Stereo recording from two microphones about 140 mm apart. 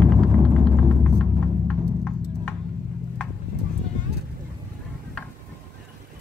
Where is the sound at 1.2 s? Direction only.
10° left (ahead or behind).